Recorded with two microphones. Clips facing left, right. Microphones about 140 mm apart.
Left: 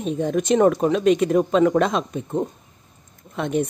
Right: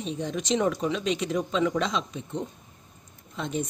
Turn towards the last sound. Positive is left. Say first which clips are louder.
# left 8 dB
turn(degrees=60)  # may be behind; listen again after turning